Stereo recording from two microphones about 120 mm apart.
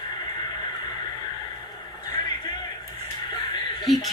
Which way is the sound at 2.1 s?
35° left (ahead or behind).